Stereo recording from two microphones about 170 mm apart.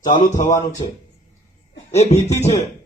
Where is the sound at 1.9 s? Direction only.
40° left (ahead or behind).